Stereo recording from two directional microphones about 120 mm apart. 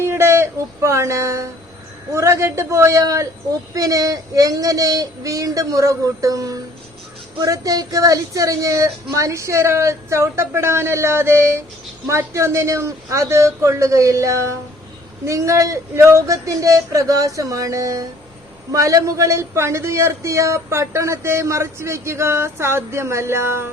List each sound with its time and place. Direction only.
0.0 s a man's voice: 20° right (ahead or behind)